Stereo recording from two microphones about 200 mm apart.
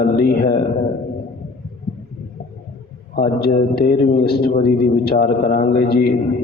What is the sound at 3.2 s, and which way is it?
A man's voice, 50° left (ahead or behind).